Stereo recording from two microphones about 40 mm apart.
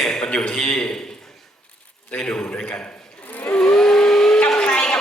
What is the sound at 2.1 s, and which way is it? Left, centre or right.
Speech, left.